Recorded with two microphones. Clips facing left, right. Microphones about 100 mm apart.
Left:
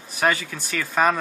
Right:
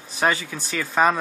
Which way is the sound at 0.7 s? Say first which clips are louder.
Right 1 dB; 10° right (ahead or behind).